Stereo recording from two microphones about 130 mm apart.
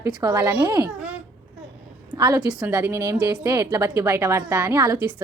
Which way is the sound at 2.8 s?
20° right (ahead or behind).